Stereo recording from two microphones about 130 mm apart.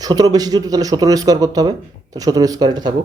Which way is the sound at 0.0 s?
30° right (ahead or behind).